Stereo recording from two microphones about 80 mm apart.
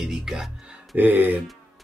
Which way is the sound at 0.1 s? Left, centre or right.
Centre.